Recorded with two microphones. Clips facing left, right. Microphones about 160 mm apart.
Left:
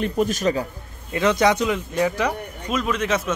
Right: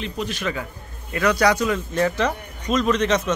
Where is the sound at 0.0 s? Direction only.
45° left (ahead or behind).